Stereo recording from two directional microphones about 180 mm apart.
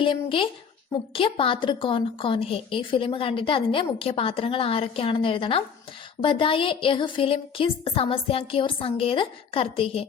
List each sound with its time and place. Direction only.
0.0 s a woman's voice: 30° left (ahead or behind)